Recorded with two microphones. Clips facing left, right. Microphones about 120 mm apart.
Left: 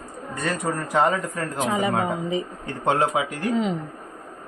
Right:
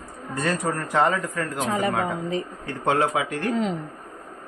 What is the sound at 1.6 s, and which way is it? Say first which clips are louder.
Speech: left 2 dB; 10° left (ahead or behind).